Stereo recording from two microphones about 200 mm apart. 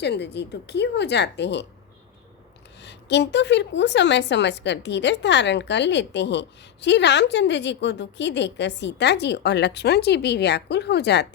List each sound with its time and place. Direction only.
0.0 s a woman's voice: 55° left (ahead or behind)
2.8 s a woman's voice: 60° left (ahead or behind)